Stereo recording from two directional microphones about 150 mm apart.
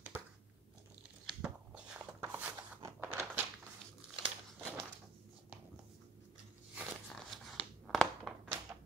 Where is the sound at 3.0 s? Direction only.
15° right (ahead or behind).